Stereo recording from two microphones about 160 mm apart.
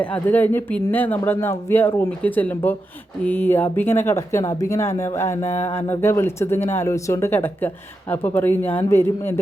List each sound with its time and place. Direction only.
0.0 s speech: 10° left (ahead or behind)